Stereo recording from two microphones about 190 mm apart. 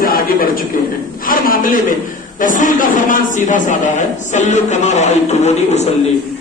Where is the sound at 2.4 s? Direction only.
45° left (ahead or behind).